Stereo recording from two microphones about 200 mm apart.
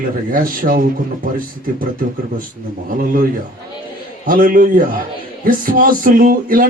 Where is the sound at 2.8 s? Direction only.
45° right (ahead or behind).